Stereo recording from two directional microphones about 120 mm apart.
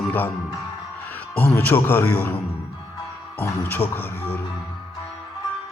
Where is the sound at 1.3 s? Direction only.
15° left (ahead or behind).